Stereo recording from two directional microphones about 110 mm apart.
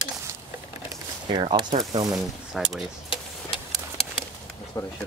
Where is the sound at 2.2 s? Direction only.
Centre (ahead or behind).